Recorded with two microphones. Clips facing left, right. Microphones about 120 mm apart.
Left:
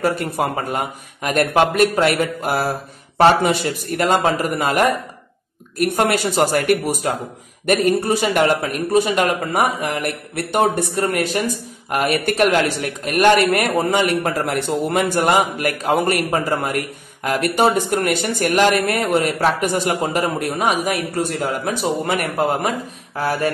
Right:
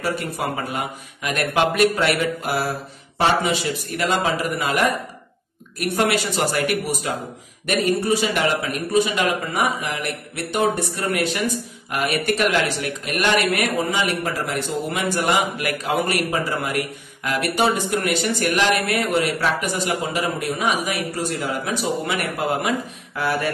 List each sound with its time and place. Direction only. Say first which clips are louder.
0.0 s a man's voice: left 5 dB; 50° left (ahead or behind)
5.9 s a man's voice: left 2 dB; 50° left (ahead or behind)
10.8 s a man's voice: left 3 dB; 45° left (ahead or behind)